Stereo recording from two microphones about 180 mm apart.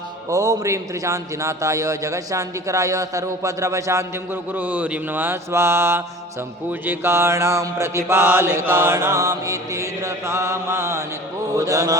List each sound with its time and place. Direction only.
0.3 s a man's voice: 15° right (ahead or behind)